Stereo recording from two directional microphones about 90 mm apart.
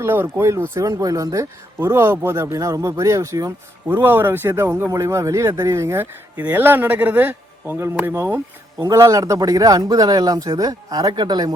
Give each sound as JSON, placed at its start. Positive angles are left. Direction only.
{"t": 0.0, "sound": "speech", "side_deg": -25}
{"t": 1.8, "sound": "speech", "side_deg": -25}
{"t": 4.0, "sound": "speech", "side_deg": -25}